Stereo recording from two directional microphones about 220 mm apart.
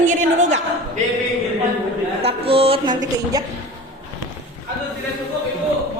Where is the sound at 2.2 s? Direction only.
25° right (ahead or behind).